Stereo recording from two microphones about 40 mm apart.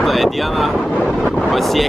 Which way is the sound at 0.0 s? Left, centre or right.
Centre.